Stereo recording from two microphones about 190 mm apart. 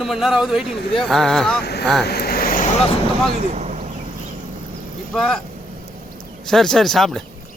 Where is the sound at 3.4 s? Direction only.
40° right (ahead or behind).